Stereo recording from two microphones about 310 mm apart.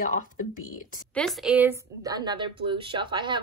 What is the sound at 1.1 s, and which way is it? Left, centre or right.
A woman's voice, centre.